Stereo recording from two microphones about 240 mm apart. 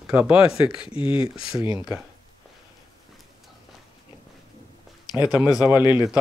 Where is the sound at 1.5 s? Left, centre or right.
Centre.